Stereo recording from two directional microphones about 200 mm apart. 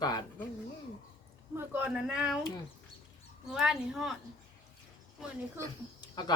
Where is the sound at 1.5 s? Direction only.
10° right (ahead or behind).